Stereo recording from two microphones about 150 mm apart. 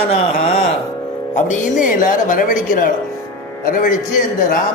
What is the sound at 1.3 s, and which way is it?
Speech, 55° left (ahead or behind).